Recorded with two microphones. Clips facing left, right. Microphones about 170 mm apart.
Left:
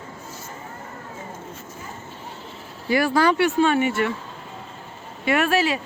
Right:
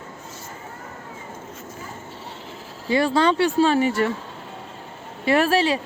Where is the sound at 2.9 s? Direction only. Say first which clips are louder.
Even; 25° right (ahead or behind).